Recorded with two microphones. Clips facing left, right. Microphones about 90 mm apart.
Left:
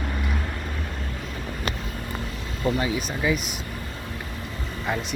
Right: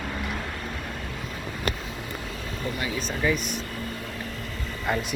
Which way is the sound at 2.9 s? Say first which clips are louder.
Left 1 dB; 10° left (ahead or behind).